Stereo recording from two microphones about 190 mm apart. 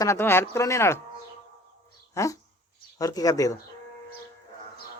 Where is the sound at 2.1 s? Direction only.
15° left (ahead or behind).